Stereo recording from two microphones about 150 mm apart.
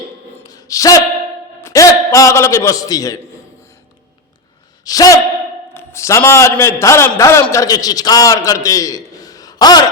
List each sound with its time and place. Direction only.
0.4 s a sound: 25° left (ahead or behind)
1.6 s a man's voice: 20° left (ahead or behind)
4.9 s a man's voice: 25° left (ahead or behind)